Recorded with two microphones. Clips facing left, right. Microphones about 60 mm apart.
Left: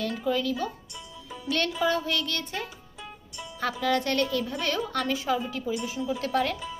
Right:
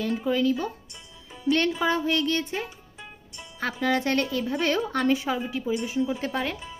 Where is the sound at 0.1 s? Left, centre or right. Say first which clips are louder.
Right 3 dB; right.